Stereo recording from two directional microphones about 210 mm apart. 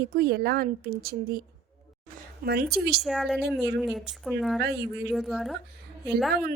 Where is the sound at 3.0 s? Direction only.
Centre (ahead or behind).